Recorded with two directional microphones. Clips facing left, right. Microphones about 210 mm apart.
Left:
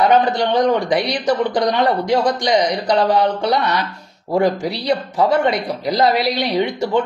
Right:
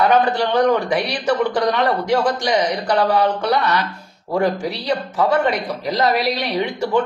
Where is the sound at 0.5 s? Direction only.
20° left (ahead or behind).